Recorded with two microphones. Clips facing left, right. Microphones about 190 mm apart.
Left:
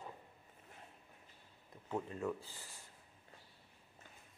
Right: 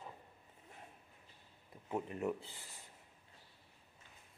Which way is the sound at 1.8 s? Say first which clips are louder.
Right 1 dB; 20° right (ahead or behind).